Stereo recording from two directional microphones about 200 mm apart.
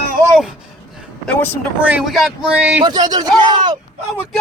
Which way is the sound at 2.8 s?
20° right (ahead or behind).